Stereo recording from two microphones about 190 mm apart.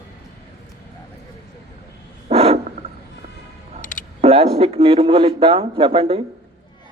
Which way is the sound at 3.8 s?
45° left (ahead or behind).